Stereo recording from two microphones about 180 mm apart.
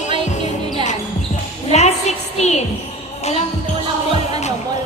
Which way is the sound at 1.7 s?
40° left (ahead or behind).